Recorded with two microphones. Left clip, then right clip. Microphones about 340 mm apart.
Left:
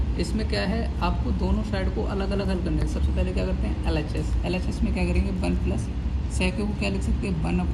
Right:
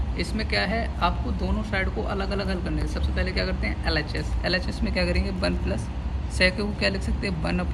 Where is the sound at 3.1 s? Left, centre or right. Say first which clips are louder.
Right 3 dB; right.